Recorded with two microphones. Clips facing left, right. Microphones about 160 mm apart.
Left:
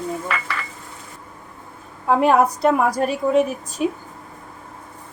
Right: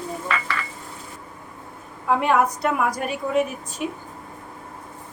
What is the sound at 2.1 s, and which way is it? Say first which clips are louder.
A woman's voice: left 4 dB; 35° left (ahead or behind).